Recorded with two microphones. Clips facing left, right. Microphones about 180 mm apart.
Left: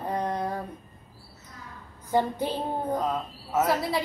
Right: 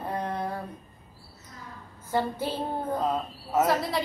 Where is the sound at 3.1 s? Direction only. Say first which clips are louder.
Right 1 dB; 10° right (ahead or behind).